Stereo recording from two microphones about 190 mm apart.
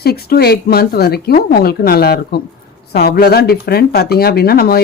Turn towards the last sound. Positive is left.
turn(degrees=55)  # may be behind; listen again after turning